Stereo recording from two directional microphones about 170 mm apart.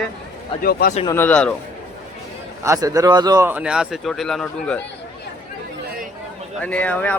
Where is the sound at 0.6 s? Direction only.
60° left (ahead or behind).